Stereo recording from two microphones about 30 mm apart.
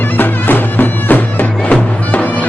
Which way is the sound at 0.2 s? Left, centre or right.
Left.